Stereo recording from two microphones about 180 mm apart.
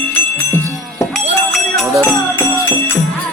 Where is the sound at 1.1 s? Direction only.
Centre (ahead or behind).